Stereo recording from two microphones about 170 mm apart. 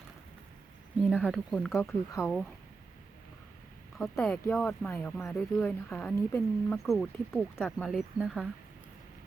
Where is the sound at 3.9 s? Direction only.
Centre (ahead or behind).